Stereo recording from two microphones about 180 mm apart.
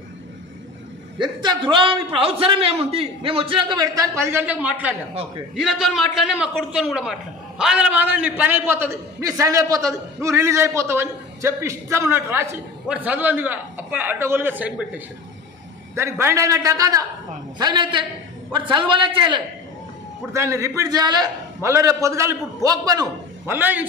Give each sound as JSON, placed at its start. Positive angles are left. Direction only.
{"t": 1.2, "sound": "a man's voice", "side_deg": -25}
{"t": 15.9, "sound": "a man's voice", "side_deg": -15}
{"t": 20.3, "sound": "a man's voice", "side_deg": -15}